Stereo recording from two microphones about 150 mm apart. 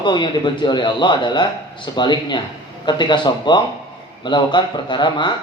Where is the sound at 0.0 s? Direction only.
30° left (ahead or behind).